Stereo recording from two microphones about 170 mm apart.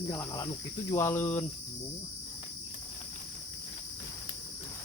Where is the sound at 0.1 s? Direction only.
20° left (ahead or behind).